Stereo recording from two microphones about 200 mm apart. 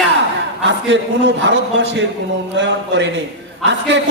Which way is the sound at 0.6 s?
65° right (ahead or behind).